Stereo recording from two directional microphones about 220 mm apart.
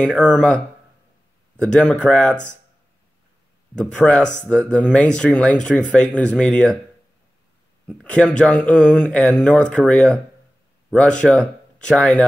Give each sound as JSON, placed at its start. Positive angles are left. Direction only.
{"t": 0.0, "sound": "speech", "side_deg": 5}
{"t": 1.6, "sound": "speech", "side_deg": 5}
{"t": 3.7, "sound": "speech", "side_deg": 5}
{"t": 7.9, "sound": "speech", "side_deg": 5}